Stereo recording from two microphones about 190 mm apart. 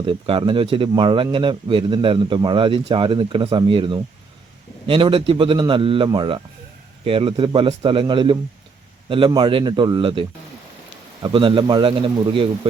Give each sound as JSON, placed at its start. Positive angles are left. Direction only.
{"t": 0.0, "sound": "speech", "side_deg": -30}